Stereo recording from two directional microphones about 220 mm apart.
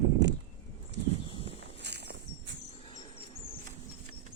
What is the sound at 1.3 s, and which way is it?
Walk, 25° left (ahead or behind).